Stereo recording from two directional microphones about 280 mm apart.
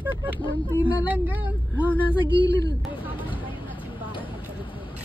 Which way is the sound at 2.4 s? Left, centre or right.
Right.